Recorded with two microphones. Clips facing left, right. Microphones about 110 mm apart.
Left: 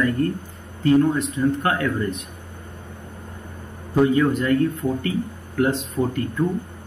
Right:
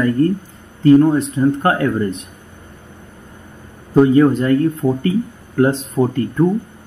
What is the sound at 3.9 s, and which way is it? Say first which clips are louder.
Speech: right 7 dB; 35° right (ahead or behind).